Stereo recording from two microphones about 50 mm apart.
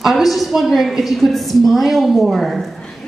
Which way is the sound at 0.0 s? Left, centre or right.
Centre.